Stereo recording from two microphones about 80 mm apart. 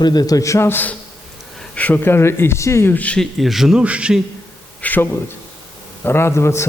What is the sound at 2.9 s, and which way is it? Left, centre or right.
Speech, centre.